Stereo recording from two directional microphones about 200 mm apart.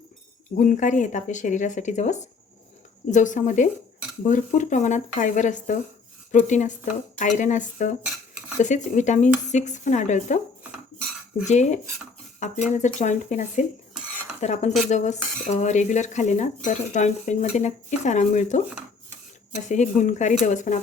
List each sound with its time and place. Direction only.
0.5 s speech: 40° left (ahead or behind)
11.4 s speech: 35° left (ahead or behind)
19.6 s speech: 35° left (ahead or behind)